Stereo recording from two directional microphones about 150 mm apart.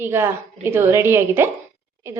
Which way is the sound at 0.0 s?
15° right (ahead or behind).